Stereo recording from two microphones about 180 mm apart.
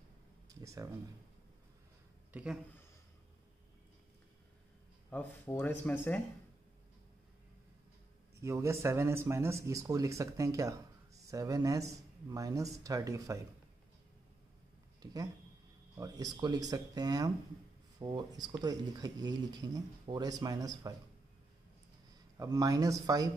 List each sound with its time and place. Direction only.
0.6 s speech: 20° right (ahead or behind)
2.3 s speech: 5° right (ahead or behind)
5.1 s speech: 10° left (ahead or behind)
8.4 s speech: 15° right (ahead or behind)
15.0 s speech: 20° right (ahead or behind)
22.4 s speech: 20° right (ahead or behind)